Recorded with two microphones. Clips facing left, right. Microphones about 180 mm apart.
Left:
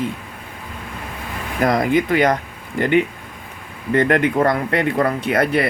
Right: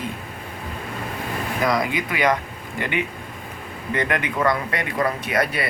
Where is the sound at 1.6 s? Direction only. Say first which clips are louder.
Left 7 dB; 50° left (ahead or behind).